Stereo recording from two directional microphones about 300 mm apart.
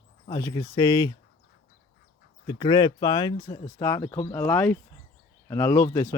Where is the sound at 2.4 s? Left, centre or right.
Centre.